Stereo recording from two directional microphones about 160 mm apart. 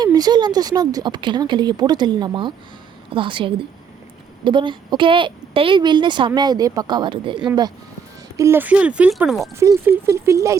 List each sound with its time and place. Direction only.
0.0 s a woman's voice: 25° right (ahead or behind)
8.4 s speech: 15° right (ahead or behind)
9.6 s a woman's voice: 15° right (ahead or behind)